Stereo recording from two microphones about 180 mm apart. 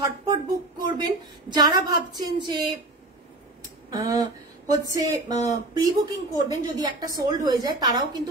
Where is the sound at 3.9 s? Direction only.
20° right (ahead or behind).